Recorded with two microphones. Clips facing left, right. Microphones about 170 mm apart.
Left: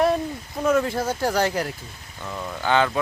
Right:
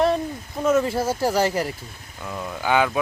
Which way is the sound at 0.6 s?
5° right (ahead or behind).